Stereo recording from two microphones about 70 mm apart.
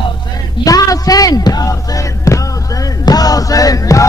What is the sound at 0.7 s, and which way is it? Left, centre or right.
Speech, left.